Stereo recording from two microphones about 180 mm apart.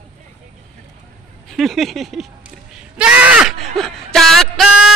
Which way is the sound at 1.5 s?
Centre (ahead or behind).